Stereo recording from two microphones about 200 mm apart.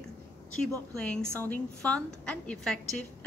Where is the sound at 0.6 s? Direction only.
5° left (ahead or behind).